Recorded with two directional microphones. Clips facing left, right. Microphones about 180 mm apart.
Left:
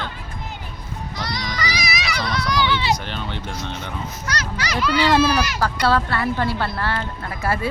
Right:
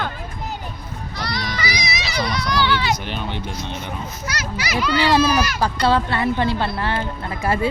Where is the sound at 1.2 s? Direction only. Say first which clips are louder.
Right 2 dB; 20° left (ahead or behind).